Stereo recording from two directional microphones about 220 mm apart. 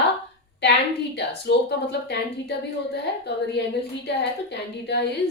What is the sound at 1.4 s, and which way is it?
A woman's voice, 50° left (ahead or behind).